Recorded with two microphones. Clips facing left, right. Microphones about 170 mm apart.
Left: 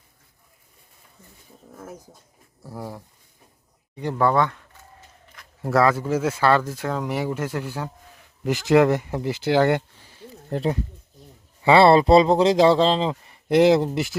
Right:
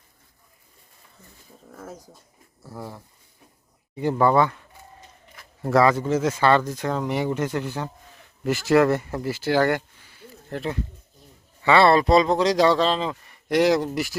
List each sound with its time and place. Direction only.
2.6 s speech: 10° left (ahead or behind)
3.9 s speech: 5° right (ahead or behind)
8.5 s speech: 20° left (ahead or behind)
10.1 s a sound: 35° left (ahead or behind)
11.6 s speech: 30° left (ahead or behind)